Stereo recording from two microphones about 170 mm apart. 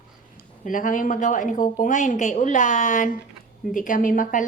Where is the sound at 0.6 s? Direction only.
50° left (ahead or behind).